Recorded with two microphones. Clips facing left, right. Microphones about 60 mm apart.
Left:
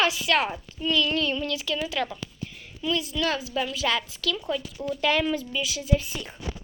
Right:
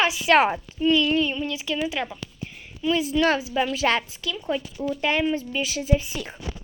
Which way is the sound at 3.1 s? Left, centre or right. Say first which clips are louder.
Right 8 dB; right.